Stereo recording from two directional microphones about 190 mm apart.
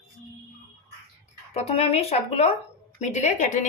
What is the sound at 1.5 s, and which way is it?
A woman's voice, 30° left (ahead or behind).